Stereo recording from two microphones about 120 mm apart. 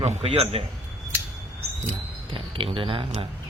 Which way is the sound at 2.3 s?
50° right (ahead or behind).